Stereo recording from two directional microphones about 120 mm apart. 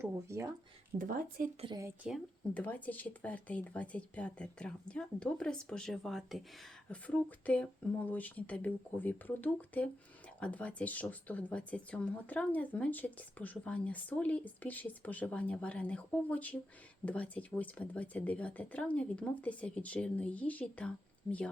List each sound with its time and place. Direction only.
0.0 s speech: 25° right (ahead or behind)
2.0 s speech: 5° right (ahead or behind)
2.5 s speech: 10° left (ahead or behind)
6.9 s speech: 10° left (ahead or behind)